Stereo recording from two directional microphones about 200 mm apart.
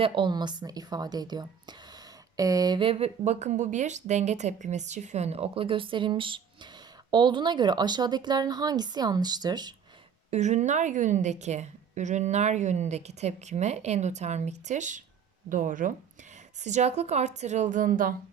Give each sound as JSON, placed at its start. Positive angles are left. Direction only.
{"t": 0.0, "sound": "a woman's voice", "side_deg": -25}
{"t": 10.3, "sound": "a woman's voice", "side_deg": -35}